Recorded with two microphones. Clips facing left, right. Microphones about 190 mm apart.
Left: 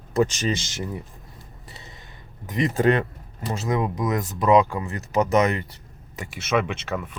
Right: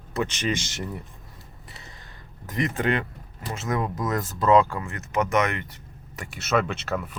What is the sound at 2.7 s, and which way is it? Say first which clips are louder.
Speech: left 7 dB; 35° left (ahead or behind).